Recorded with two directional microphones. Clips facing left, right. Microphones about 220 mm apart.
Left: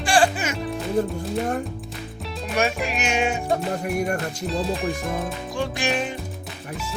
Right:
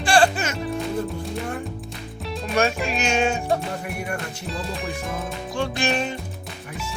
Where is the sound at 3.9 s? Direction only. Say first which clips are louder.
Left 6 dB; 40° left (ahead or behind).